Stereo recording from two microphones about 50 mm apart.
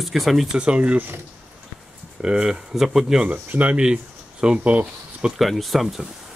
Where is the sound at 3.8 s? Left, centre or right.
Centre.